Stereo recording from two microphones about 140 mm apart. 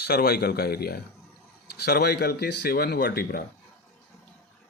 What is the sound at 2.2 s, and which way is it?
Speech, 90° left.